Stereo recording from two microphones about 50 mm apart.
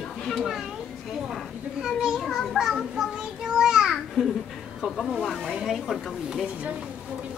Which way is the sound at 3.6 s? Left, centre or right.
Centre.